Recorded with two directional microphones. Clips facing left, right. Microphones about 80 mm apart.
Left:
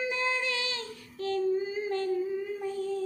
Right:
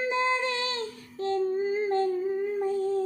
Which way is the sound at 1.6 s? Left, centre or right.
Right.